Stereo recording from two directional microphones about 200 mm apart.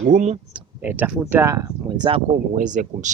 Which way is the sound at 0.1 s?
35° right (ahead or behind).